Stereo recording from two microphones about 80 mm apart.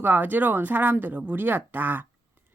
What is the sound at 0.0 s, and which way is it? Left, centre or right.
Speech, right.